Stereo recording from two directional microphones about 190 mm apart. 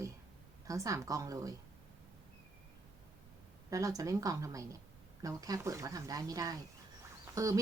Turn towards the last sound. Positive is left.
turn(degrees=-15)  # may be behind; listen again after turning